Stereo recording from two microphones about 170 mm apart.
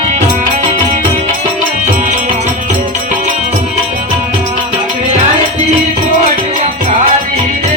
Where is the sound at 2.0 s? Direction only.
45° right (ahead or behind).